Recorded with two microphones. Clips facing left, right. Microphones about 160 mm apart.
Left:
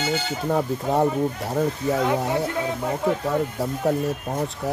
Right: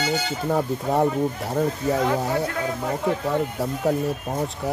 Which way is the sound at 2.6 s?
20° left (ahead or behind).